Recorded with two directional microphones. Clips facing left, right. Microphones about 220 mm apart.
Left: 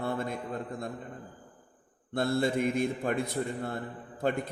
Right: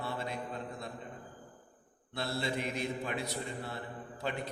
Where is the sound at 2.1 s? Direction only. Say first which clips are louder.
Left 8 dB; 50° left (ahead or behind).